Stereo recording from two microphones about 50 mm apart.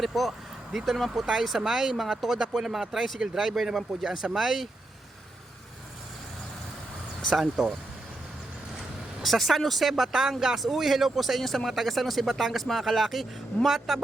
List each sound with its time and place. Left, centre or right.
0.0 s vehicle: centre
0.9 s speech: centre
7.4 s speech: centre
9.2 s speech: centre